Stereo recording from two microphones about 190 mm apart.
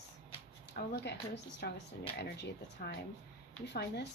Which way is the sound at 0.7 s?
60° left (ahead or behind).